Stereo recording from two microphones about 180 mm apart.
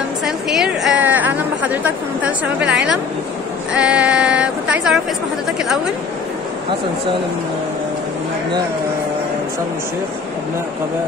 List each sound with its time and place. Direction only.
0.2 s a woman's voice: centre (ahead or behind)
3.7 s speech: 5° right (ahead or behind)